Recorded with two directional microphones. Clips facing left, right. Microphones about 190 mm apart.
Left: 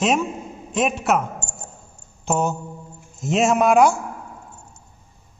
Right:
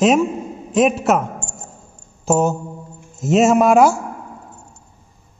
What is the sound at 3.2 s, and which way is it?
Speech, 5° right (ahead or behind).